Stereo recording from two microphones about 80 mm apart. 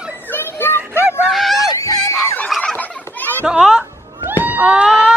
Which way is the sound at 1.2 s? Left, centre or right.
Centre.